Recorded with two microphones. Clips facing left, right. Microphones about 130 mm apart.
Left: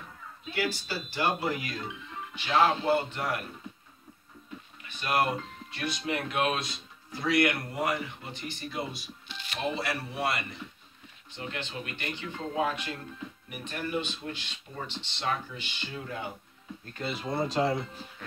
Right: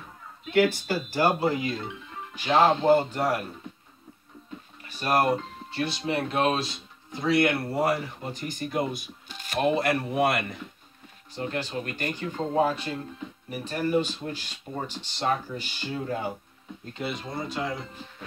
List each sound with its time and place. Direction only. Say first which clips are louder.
0.6 s speech: right 9 dB; 50° right (ahead or behind)
1.4 s speech: right 6 dB; 25° right (ahead or behind)
2.3 s speech: right 4 dB; 40° right (ahead or behind)
4.8 s speech: right 4 dB; 40° right (ahead or behind); by 10.6 s 55° right (ahead or behind)
11.3 s speech: right 7 dB; 40° right (ahead or behind)
17.3 s speech: left 8 dB; 35° left (ahead or behind)